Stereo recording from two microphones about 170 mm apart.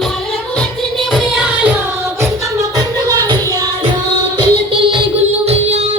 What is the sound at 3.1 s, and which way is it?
Music, 20° right (ahead or behind).